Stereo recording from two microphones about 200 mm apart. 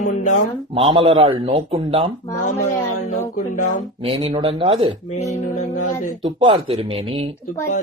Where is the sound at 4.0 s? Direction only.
25° right (ahead or behind).